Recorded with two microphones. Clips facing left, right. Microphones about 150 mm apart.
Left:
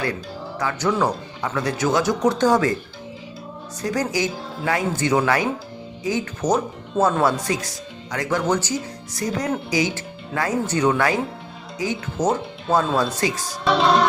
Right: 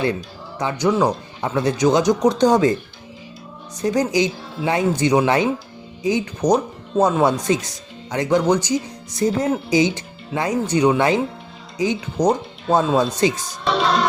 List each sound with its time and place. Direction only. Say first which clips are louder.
0.6 s speech: right 3 dB; 15° right (ahead or behind)
1.4 s speech: right 5 dB; 25° right (ahead or behind)
3.8 s speech: right 5 dB; 20° right (ahead or behind)
9.1 s speech: right 5 dB; 25° right (ahead or behind)